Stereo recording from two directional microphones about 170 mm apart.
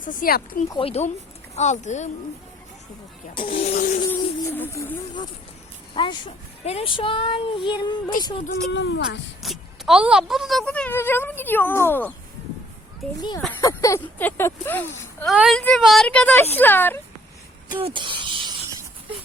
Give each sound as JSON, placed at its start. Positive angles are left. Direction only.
{"t": 0.0, "sound": "speech", "side_deg": 55}
{"t": 0.7, "sound": "speech", "side_deg": 35}
{"t": 3.8, "sound": "speech", "side_deg": 55}
{"t": 4.1, "sound": "a sound", "side_deg": 10}
{"t": 5.9, "sound": "speech", "side_deg": 30}
{"t": 8.7, "sound": "speech", "side_deg": 90}
{"t": 9.4, "sound": "speech", "side_deg": 0}
{"t": 13.6, "sound": "speech", "side_deg": 20}
{"t": 15.4, "sound": "speech", "side_deg": 0}
{"t": 17.7, "sound": "speech", "side_deg": -30}